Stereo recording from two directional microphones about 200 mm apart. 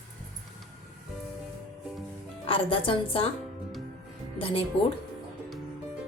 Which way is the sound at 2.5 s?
25° left (ahead or behind).